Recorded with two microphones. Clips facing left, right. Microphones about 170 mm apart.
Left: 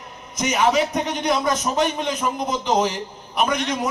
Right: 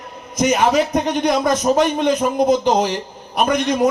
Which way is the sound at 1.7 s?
60° right (ahead or behind).